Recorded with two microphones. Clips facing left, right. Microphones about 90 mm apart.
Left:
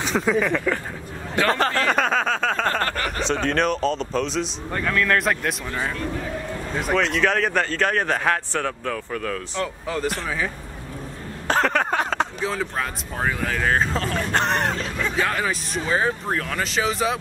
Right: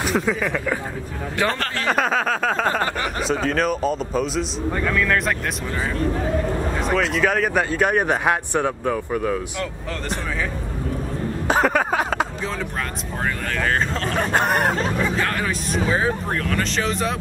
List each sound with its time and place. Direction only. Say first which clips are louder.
0.0 s speech: even; centre (ahead or behind)
1.5 s speech: left 5 dB; 20° left (ahead or behind)
1.9 s speech: right 1 dB; 5° right (ahead or behind)
11.4 s a sound: right 1 dB; 10° right (ahead or behind)
13.2 s speech: left 1 dB; 5° left (ahead or behind)
14.3 s speech: right 2 dB; 10° right (ahead or behind)
15.1 s speech: even; 5° left (ahead or behind)